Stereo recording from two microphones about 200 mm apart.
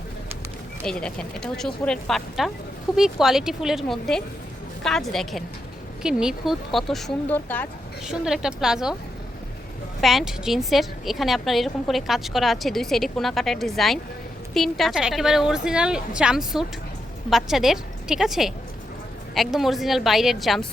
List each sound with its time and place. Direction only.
0.9 s a woman's voice: 5° left (ahead or behind)
8.0 s a woman's voice: centre (ahead or behind)
10.0 s a woman's voice: centre (ahead or behind)